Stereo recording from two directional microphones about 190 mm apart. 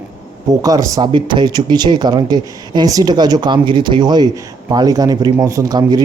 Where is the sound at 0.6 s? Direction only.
20° right (ahead or behind).